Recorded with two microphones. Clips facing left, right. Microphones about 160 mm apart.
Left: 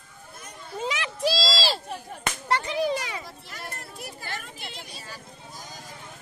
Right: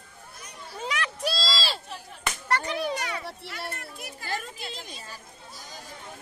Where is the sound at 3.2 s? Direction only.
70° right (ahead or behind).